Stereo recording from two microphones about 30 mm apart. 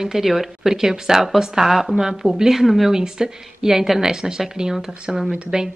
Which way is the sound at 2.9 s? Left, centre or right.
Right.